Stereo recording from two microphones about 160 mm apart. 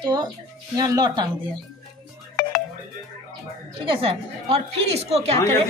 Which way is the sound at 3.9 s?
35° right (ahead or behind).